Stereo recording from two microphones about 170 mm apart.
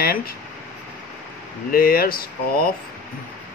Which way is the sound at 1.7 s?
60° left (ahead or behind).